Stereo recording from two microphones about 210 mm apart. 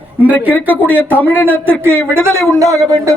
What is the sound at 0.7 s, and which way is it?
Speech, 10° left (ahead or behind).